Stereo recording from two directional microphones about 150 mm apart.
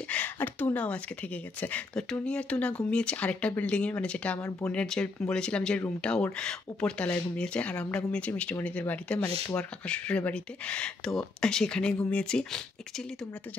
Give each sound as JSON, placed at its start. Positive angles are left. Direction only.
{"t": 0.1, "sound": "speech", "side_deg": 10}